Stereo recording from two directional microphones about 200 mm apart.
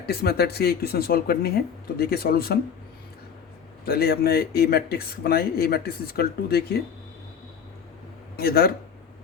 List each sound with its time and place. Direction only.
0.0 s speech: 50° left (ahead or behind)
3.8 s speech: 50° left (ahead or behind)
8.4 s speech: 50° left (ahead or behind)